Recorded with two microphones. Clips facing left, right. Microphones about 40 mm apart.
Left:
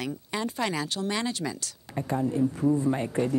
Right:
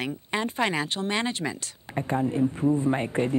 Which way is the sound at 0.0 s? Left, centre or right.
Right.